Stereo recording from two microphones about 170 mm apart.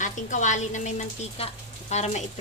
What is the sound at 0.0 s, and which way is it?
A woman's voice, 45° left (ahead or behind).